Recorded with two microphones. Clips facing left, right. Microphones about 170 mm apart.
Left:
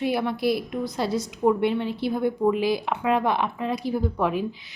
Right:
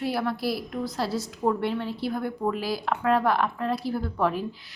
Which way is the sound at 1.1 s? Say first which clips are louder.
Left 4 dB; centre (ahead or behind).